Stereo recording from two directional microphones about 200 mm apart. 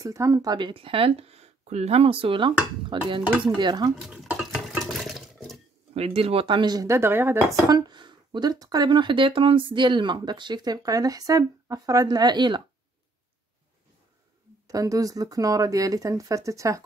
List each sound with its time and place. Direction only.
0.0 s speech: 15° right (ahead or behind)
3.9 s a sound: 5° right (ahead or behind)
5.9 s speech: 30° right (ahead or behind)
14.7 s speech: 15° right (ahead or behind)